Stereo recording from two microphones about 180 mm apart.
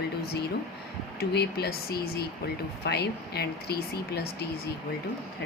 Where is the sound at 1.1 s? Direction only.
60° left (ahead or behind).